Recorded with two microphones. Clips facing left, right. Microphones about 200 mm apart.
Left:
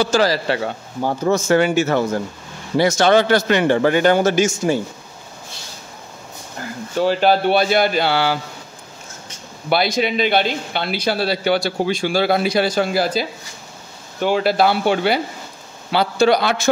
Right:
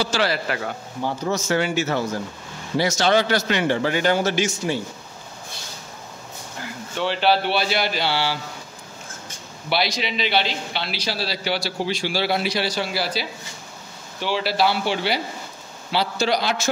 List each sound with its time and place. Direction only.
0.0 s a man's voice: 45° left (ahead or behind)
1.0 s a man's voice: 50° left (ahead or behind)
7.0 s a man's voice: 45° left (ahead or behind)
9.7 s a man's voice: 50° left (ahead or behind)